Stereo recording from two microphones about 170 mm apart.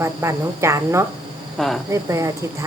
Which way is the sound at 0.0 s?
15° right (ahead or behind).